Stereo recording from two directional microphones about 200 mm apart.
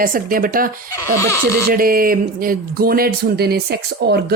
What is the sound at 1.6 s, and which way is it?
Speech, 45° right (ahead or behind).